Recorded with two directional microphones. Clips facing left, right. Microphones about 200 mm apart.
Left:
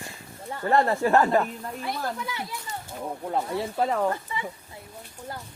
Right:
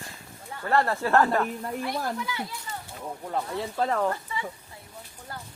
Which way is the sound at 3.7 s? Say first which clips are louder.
Left 1 dB; 10° left (ahead or behind).